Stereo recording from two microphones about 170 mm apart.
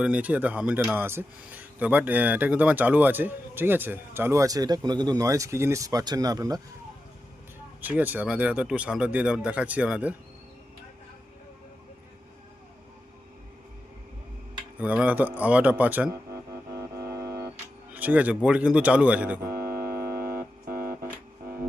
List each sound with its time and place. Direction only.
0.0 s speech: 10° right (ahead or behind)
7.8 s speech: 10° right (ahead or behind)
14.8 s speech: 10° right (ahead or behind)
16.0 s music: 20° right (ahead or behind)
17.9 s speech: 10° right (ahead or behind)
19.8 s music: 15° right (ahead or behind)